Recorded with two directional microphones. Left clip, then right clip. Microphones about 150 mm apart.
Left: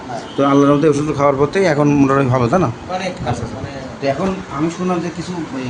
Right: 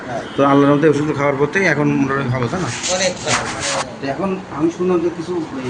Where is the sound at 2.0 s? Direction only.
30° left (ahead or behind).